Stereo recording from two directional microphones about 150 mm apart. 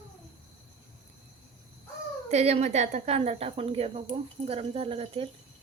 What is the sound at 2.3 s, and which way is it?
A woman's voice, 45° right (ahead or behind).